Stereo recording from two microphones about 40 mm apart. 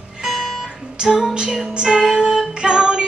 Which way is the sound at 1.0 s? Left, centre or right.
Centre.